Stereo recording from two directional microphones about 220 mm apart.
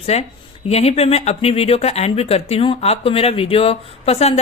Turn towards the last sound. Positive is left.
turn(degrees=30)  # may be behind; listen again after turning